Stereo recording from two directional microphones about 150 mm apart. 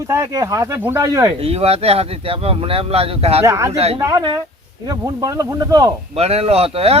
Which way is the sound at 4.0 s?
25° right (ahead or behind).